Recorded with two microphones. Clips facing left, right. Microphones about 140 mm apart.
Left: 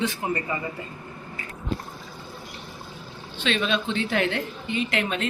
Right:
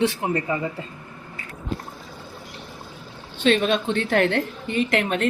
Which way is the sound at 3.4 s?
50° right (ahead or behind).